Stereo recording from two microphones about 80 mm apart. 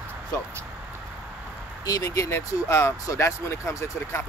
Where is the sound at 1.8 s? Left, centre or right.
Left.